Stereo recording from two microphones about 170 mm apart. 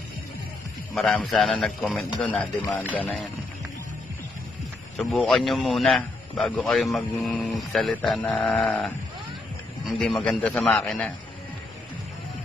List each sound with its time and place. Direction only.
0.9 s a man's voice: centre (ahead or behind)
4.9 s a man's voice: centre (ahead or behind)